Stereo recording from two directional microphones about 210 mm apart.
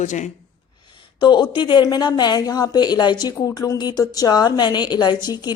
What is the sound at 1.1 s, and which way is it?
A woman's voice, 20° left (ahead or behind).